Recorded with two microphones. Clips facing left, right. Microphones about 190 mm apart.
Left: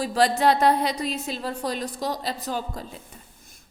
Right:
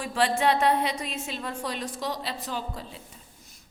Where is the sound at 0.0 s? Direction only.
40° left (ahead or behind).